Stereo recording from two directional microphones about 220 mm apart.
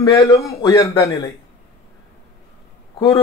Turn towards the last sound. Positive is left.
turn(degrees=20)  # may be behind; listen again after turning